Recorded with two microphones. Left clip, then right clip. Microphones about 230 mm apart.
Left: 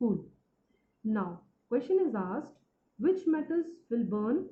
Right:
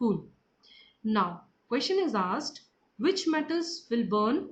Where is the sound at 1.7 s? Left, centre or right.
Right.